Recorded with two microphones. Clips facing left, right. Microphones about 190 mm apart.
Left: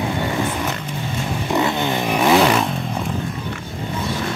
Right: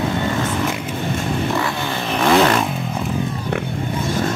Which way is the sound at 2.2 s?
5° left (ahead or behind).